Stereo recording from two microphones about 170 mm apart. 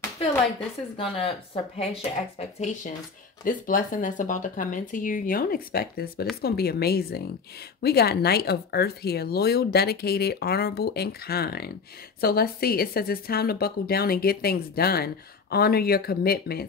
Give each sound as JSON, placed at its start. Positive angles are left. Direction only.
{"t": 0.9, "sound": "speech", "side_deg": 35}
{"t": 3.4, "sound": "a woman's voice", "side_deg": 55}